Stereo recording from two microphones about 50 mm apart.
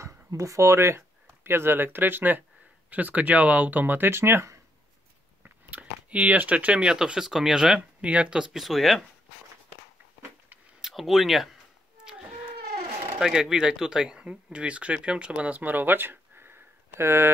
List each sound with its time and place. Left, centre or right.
0.0 s speech: right
5.4 s speech: right; by 7.8 s centre
8.0 s speech: right; by 9.0 s centre
10.8 s speech: centre
13.2 s speech: centre; by 17.3 s right